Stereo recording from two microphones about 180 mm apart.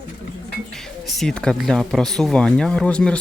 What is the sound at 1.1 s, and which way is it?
Speech, 5° left (ahead or behind).